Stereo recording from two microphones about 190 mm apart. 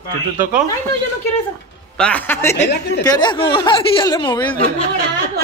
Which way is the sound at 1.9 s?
5° left (ahead or behind).